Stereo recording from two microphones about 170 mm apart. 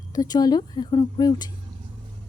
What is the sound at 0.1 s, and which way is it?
A woman's voice, 25° left (ahead or behind).